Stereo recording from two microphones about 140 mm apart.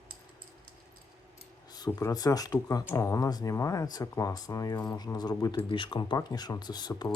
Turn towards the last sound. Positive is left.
turn(degrees=30)  # may be behind; listen again after turning